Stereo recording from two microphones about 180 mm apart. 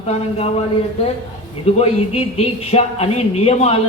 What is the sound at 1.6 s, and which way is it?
A man's voice, 35° left (ahead or behind).